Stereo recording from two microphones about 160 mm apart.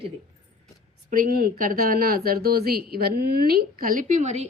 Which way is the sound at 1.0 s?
60° right (ahead or behind).